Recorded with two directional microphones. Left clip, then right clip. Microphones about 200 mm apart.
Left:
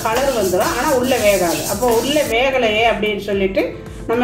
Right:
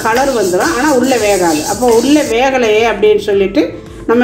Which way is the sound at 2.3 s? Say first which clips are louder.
Right 3 dB; 40° right (ahead or behind).